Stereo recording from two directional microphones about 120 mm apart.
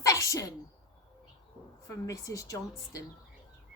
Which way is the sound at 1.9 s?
25° left (ahead or behind).